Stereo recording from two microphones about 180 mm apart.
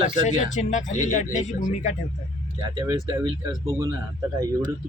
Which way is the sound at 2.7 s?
25° right (ahead or behind).